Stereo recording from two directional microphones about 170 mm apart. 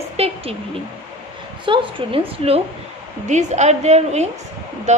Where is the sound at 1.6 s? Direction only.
30° right (ahead or behind).